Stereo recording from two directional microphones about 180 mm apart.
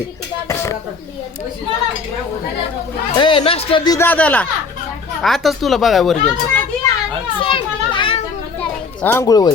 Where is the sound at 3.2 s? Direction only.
30° left (ahead or behind).